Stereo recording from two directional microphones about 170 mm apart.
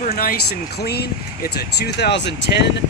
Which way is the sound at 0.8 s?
70° left (ahead or behind).